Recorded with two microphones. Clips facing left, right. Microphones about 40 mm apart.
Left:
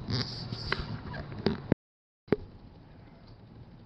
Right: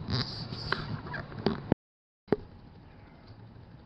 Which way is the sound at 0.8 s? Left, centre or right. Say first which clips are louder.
Right 1 dB; right.